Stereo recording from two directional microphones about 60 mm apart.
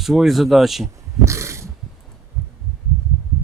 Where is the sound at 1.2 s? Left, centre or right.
Right.